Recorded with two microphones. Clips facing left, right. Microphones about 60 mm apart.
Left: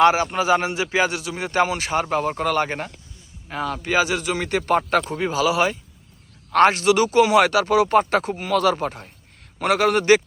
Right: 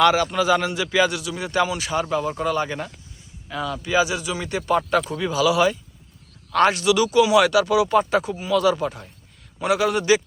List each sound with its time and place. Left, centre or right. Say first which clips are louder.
0.0 s a man's voice: left 1 dB; left